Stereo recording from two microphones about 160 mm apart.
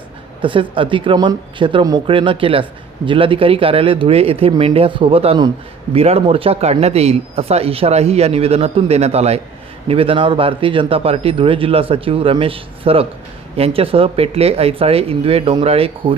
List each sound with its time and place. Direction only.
0.4 s speech: 30° right (ahead or behind)